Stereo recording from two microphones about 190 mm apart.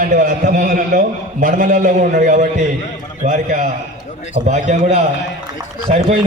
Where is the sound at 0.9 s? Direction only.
50° right (ahead or behind).